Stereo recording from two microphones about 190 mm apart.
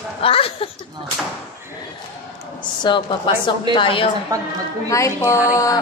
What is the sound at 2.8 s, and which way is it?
A woman's voice, 25° left (ahead or behind).